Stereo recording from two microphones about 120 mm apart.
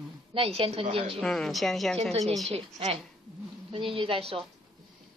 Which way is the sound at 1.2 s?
5° left (ahead or behind).